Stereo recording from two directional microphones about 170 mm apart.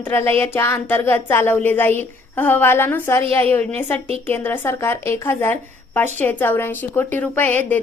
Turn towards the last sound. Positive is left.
turn(degrees=10)  # may be behind; listen again after turning